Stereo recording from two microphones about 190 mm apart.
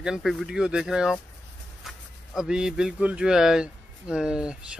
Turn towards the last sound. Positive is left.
turn(degrees=-5)  # may be behind; listen again after turning